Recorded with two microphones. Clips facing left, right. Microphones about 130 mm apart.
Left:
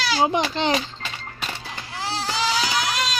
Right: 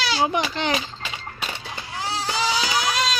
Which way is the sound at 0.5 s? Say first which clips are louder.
Left 2 dB; 25° left (ahead or behind).